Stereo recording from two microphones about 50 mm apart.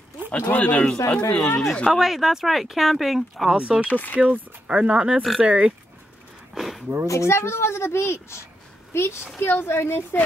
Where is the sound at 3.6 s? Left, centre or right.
Right.